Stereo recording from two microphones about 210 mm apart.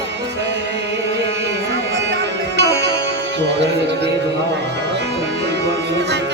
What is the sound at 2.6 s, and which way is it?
Music, 55° right (ahead or behind).